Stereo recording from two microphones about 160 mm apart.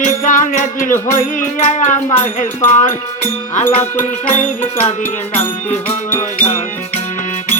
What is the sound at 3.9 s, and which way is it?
Music, 10° left (ahead or behind).